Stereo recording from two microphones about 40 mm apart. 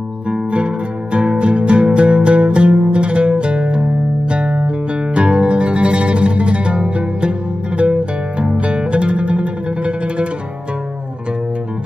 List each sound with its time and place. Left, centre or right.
0.3 s music: right